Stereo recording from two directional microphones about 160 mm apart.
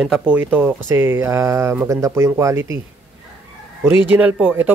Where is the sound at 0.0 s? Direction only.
5° right (ahead or behind).